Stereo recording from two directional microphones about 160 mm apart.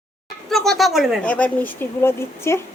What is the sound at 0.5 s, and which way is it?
Speech, centre (ahead or behind).